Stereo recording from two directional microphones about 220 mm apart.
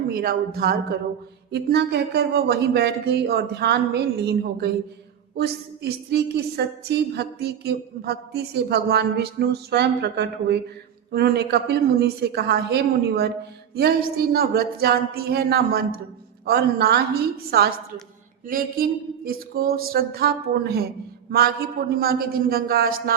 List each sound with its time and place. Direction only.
0.1 s a woman's voice: 45° right (ahead or behind)